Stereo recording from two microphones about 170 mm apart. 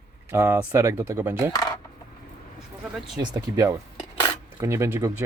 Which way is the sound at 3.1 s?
20° right (ahead or behind).